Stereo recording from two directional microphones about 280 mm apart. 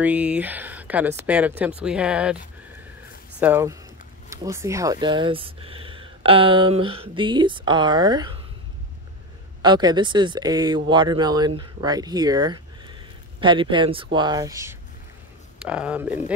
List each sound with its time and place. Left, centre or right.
0.0 s speech: centre
3.3 s speech: centre
9.6 s speech: centre